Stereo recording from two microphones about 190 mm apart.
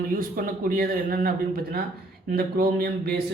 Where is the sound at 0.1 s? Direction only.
50° right (ahead or behind).